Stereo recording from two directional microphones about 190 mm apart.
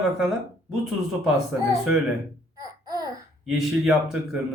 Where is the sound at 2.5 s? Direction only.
20° right (ahead or behind).